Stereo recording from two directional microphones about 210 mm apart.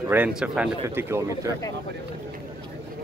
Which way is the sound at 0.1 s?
5° right (ahead or behind).